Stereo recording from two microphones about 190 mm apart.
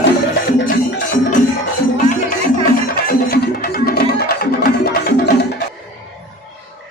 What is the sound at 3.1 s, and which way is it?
Music, 50° left (ahead or behind).